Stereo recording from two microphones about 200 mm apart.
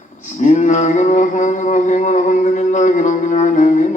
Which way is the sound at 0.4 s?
35° left (ahead or behind).